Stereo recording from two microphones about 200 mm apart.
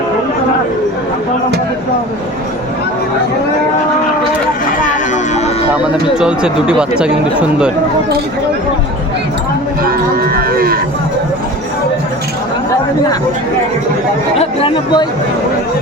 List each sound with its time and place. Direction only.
4.8 s a sound: 35° left (ahead or behind)
5.7 s speech: 5° right (ahead or behind)
9.8 s cattle: 45° right (ahead or behind)
14.3 s speech: 30° left (ahead or behind)